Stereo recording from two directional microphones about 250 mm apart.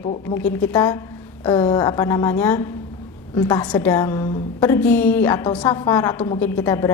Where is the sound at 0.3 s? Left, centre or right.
Centre.